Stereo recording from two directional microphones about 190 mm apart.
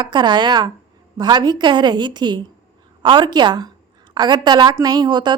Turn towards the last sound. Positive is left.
turn(degrees=-25)  # may be behind; listen again after turning